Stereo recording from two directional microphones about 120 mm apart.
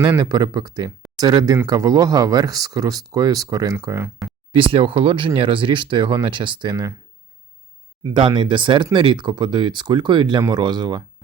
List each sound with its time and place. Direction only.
0.0 s speech: 35° right (ahead or behind)
4.2 s a sound: centre (ahead or behind)
4.5 s speech: 50° right (ahead or behind)
8.1 s speech: 40° right (ahead or behind)